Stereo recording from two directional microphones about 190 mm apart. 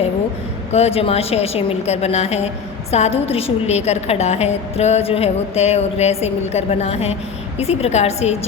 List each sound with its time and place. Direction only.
0.7 s a woman's voice: 30° left (ahead or behind)